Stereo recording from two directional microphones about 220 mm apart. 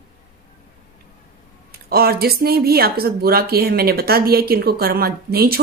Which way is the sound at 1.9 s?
45° right (ahead or behind).